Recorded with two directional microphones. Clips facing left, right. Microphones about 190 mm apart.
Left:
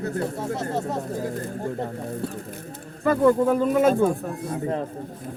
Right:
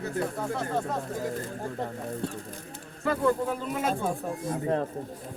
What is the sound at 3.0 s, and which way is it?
Speech, 50° left (ahead or behind).